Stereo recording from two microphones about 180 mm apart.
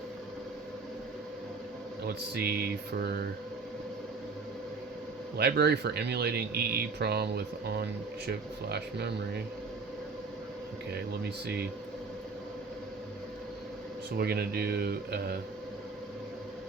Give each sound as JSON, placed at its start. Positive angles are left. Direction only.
{"t": 2.0, "sound": "speech", "side_deg": -60}
{"t": 5.4, "sound": "speech", "side_deg": -65}
{"t": 11.1, "sound": "speech", "side_deg": -60}
{"t": 14.2, "sound": "speech", "side_deg": -60}